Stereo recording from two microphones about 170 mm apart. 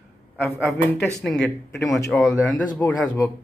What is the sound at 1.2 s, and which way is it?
Speech, centre (ahead or behind).